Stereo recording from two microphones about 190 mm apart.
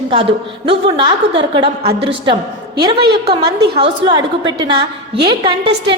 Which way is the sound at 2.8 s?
30° right (ahead or behind).